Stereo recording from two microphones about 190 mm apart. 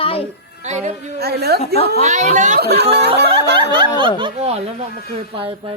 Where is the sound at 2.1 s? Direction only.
40° right (ahead or behind).